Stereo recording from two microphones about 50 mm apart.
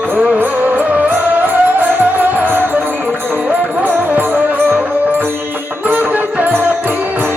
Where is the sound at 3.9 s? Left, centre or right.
Right.